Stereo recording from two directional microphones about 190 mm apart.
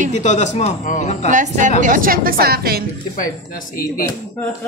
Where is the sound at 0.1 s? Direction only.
40° left (ahead or behind).